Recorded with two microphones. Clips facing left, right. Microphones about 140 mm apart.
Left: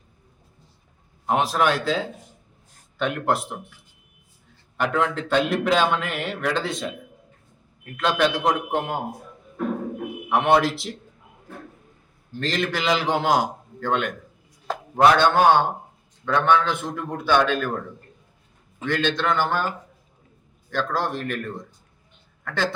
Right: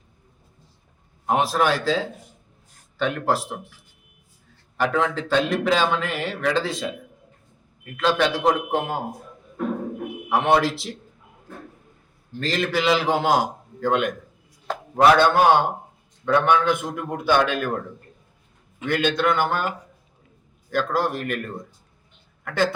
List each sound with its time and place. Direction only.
1.3 s speech: centre (ahead or behind)
4.8 s speech: centre (ahead or behind)
7.9 s speech: centre (ahead or behind)
10.2 s speech: centre (ahead or behind)
12.4 s a man's voice: centre (ahead or behind)
18.9 s a man's voice: 10° right (ahead or behind)
20.7 s a man's voice: 10° right (ahead or behind)